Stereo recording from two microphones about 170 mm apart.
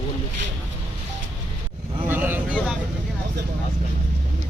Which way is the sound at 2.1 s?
10° right (ahead or behind).